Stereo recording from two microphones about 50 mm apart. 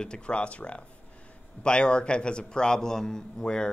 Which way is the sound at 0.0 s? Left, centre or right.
Centre.